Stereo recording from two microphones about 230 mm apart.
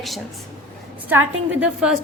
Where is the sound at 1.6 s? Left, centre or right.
Centre.